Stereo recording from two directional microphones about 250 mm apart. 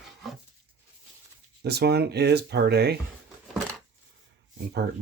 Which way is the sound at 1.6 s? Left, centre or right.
Right.